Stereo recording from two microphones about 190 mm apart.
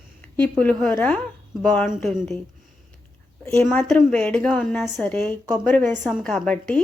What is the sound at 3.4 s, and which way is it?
A woman's voice, 10° left (ahead or behind).